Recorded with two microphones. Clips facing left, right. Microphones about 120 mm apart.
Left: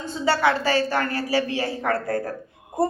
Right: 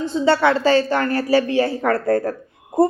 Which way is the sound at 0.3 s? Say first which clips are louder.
Right 5 dB; 30° right (ahead or behind).